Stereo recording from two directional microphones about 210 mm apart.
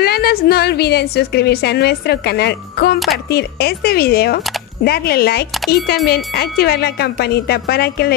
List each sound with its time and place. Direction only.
0.0 s speech: 50° left (ahead or behind)